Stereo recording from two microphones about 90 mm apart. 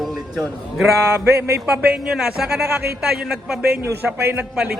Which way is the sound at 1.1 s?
25° right (ahead or behind).